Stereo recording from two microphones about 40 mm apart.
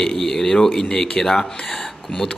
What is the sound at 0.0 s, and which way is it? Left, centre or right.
Speech, centre.